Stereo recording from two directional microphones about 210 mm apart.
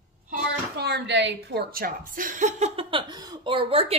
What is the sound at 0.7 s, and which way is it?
A woman's voice, 50° right (ahead or behind).